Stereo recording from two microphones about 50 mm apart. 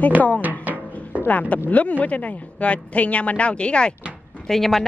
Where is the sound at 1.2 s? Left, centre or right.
Left.